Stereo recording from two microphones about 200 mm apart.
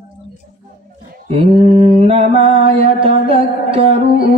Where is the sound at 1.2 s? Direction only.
30° right (ahead or behind).